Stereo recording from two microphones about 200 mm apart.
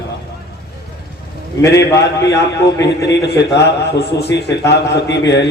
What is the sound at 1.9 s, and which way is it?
Speech, 20° left (ahead or behind).